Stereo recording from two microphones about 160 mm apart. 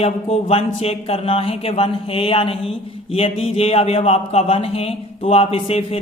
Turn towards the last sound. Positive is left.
turn(degrees=40)  # may be behind; listen again after turning